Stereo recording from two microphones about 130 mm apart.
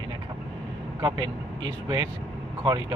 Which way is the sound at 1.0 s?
35° right (ahead or behind).